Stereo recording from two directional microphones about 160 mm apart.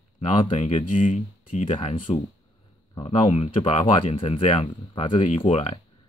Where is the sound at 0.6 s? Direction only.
45° left (ahead or behind).